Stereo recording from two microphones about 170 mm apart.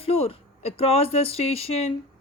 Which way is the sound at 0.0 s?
35° left (ahead or behind).